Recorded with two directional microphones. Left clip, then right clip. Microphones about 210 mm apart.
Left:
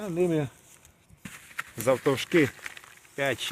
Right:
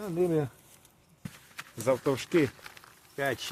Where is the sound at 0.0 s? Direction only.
35° left (ahead or behind).